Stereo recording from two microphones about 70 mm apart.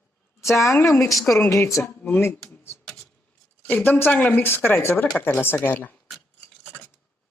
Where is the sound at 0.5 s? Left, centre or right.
Left.